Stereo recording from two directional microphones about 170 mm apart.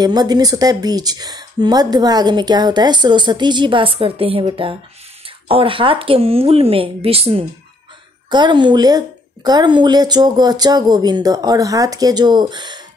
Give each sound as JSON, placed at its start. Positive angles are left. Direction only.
{"t": 0.0, "sound": "speech", "side_deg": -25}